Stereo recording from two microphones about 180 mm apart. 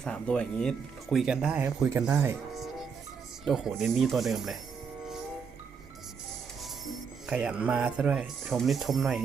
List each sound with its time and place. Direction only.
0.0 s speech: 5° left (ahead or behind); by 2.4 s 15° right (ahead or behind)
2.5 s music: centre (ahead or behind)
3.4 s speech: centre (ahead or behind)
7.3 s speech: 5° right (ahead or behind)